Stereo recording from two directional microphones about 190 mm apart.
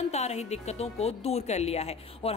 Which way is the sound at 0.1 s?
35° left (ahead or behind).